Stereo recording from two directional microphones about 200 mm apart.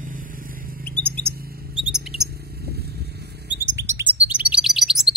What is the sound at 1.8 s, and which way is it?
Mouse, 5° right (ahead or behind).